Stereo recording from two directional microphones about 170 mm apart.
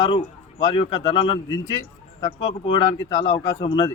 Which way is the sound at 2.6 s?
25° left (ahead or behind).